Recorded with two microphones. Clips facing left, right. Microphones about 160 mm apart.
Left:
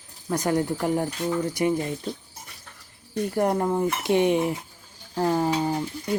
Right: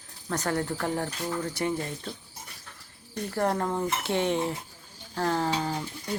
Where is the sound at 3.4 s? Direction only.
15° left (ahead or behind).